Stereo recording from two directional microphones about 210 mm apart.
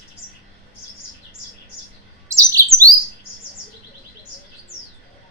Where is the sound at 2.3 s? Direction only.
15° right (ahead or behind).